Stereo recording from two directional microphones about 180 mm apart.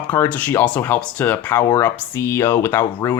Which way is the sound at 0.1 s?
10° left (ahead or behind).